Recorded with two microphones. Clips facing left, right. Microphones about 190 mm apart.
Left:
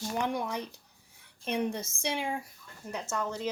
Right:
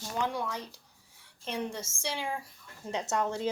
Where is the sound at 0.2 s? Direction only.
20° left (ahead or behind).